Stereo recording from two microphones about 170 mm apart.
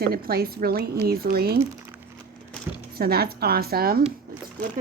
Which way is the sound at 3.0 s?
65° right (ahead or behind).